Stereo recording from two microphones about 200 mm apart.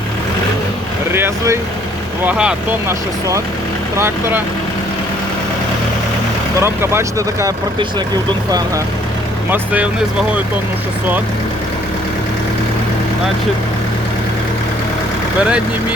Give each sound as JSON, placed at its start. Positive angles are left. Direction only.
{"t": 1.1, "sound": "speech", "side_deg": -10}
{"t": 3.9, "sound": "speech", "side_deg": -10}
{"t": 6.6, "sound": "speech", "side_deg": -15}
{"t": 9.5, "sound": "speech", "side_deg": -5}